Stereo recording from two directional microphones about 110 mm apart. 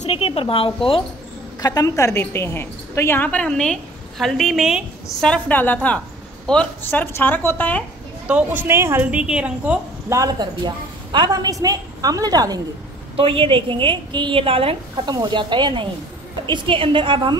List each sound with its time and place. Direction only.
0.0 s speech: 60° left (ahead or behind)
1.6 s a woman's voice: 35° left (ahead or behind); by 4.8 s 5° right (ahead or behind)
5.2 s a woman's voice: 10° left (ahead or behind)
8.3 s speech: 15° right (ahead or behind)
9.0 s a woman's voice: 10° right (ahead or behind)
10.0 s a woman's voice: 30° right (ahead or behind)
13.1 s a woman's voice: 55° right (ahead or behind)
15.0 s a woman's voice: 40° right (ahead or behind)